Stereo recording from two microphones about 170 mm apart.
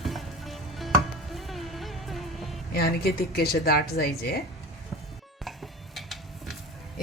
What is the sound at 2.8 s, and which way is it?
A woman's voice, 65° left (ahead or behind).